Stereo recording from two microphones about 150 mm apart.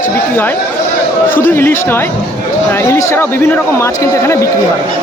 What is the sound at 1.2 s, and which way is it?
Speech, 65° left (ahead or behind).